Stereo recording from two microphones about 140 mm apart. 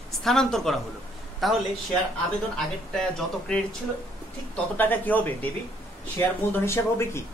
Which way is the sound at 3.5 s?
5° left (ahead or behind).